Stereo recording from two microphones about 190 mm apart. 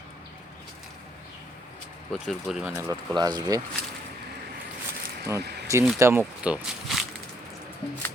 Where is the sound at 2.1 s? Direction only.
Centre (ahead or behind).